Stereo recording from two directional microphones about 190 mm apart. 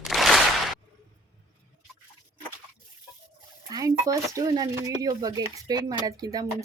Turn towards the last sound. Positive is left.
turn(degrees=-20)  # may be behind; listen again after turning